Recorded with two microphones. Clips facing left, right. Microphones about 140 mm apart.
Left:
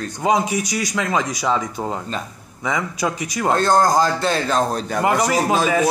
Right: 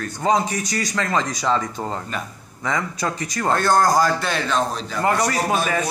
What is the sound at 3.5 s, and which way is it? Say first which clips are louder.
A man's voice: left 1 dB; 20° left (ahead or behind).